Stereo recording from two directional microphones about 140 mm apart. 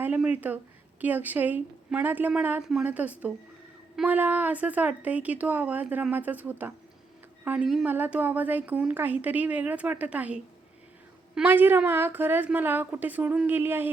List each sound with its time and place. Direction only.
0.0 s a woman's voice: 10° right (ahead or behind)